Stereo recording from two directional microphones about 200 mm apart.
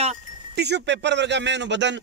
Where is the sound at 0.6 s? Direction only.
60° right (ahead or behind).